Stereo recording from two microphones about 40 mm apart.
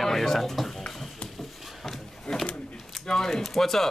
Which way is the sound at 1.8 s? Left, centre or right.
Centre.